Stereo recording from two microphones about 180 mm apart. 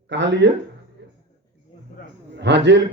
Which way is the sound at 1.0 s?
70° right (ahead or behind).